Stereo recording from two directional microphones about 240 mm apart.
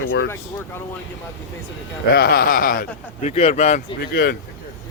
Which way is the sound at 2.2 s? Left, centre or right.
Left.